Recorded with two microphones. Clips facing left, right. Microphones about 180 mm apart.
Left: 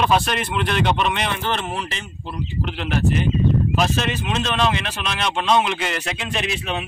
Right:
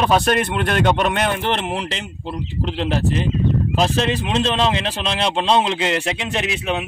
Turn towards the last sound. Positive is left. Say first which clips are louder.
# right 3 dB
turn(degrees=-15)  # may be behind; listen again after turning